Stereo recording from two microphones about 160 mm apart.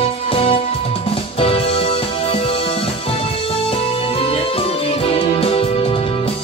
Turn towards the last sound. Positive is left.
turn(degrees=35)  # may be behind; listen again after turning